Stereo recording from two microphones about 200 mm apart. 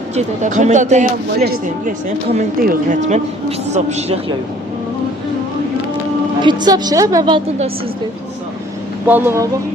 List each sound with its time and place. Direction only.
0.1 s speech: 35° right (ahead or behind)
1.4 s speech: 50° right (ahead or behind); by 4.2 s 35° right (ahead or behind)
6.4 s a woman's voice: 20° right (ahead or behind)
9.0 s speech: 10° right (ahead or behind)